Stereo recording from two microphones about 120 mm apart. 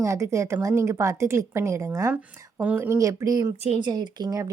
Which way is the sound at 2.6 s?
15° right (ahead or behind).